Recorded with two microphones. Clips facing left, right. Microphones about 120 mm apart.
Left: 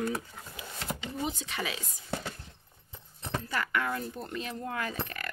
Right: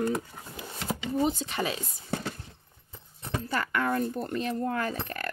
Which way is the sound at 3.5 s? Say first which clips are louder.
Right 4 dB; 35° right (ahead or behind).